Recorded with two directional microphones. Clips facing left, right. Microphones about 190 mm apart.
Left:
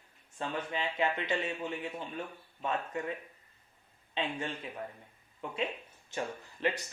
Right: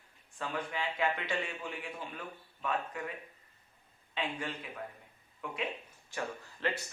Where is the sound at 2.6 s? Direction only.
25° left (ahead or behind).